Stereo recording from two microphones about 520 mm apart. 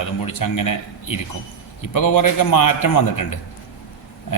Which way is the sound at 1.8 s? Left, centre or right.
Left.